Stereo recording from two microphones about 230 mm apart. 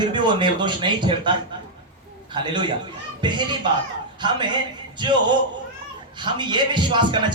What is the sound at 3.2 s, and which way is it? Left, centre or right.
A man's voice, centre.